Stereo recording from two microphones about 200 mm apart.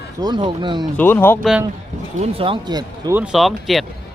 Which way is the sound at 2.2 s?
25° right (ahead or behind).